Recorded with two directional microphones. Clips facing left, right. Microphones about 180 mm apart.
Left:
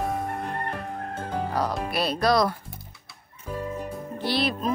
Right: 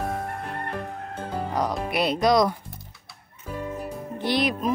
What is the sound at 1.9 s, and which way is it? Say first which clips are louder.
Speech: right 3 dB; 20° right (ahead or behind).